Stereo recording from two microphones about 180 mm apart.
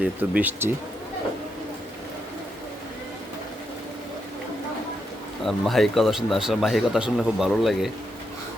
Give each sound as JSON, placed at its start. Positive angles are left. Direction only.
{"t": 0.0, "sound": "speech", "side_deg": -10}
{"t": 5.5, "sound": "speech", "side_deg": 0}